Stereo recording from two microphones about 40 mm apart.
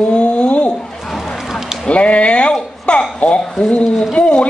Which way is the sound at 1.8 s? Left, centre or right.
Left.